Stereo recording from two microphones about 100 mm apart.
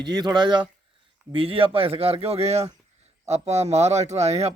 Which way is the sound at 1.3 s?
65° right (ahead or behind).